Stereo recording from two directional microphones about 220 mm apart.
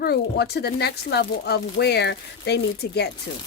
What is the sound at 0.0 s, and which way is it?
Speech, 45° left (ahead or behind).